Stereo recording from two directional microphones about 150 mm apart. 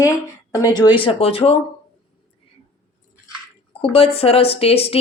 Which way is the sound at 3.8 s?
40° left (ahead or behind).